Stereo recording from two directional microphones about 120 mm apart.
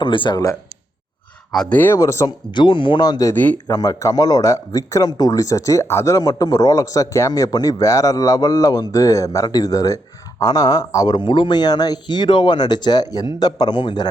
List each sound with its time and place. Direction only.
0.0 s speech: 45° left (ahead or behind)
1.7 s speech: 15° left (ahead or behind)
2.0 s speech: 25° left (ahead or behind)
2.6 s speech: 45° left (ahead or behind)
3.3 s speech: 15° left (ahead or behind)
3.7 s speech: 25° left (ahead or behind)